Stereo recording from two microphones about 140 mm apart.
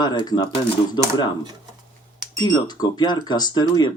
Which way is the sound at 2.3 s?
30° left (ahead or behind).